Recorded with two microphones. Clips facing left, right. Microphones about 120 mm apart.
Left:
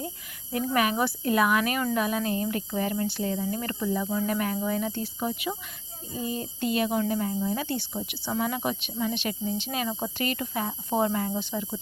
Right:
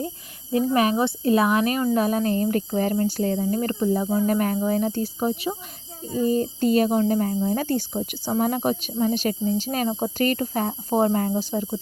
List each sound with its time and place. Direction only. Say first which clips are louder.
0.5 s speech: right 5 dB; 30° right (ahead or behind)